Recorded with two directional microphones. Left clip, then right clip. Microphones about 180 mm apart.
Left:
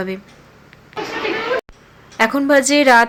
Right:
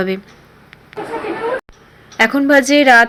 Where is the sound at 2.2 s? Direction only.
5° right (ahead or behind).